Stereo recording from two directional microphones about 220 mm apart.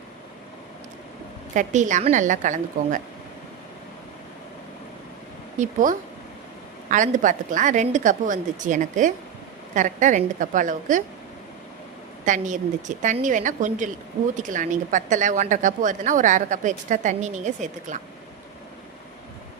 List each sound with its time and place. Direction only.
1.5 s a woman's voice: 35° right (ahead or behind)
5.5 s a woman's voice: 35° right (ahead or behind)
12.2 s a woman's voice: 35° right (ahead or behind)